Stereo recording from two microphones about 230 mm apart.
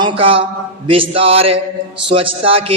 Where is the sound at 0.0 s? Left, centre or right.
Right.